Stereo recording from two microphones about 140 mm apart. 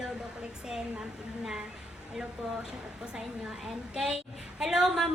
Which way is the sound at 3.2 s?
5° right (ahead or behind).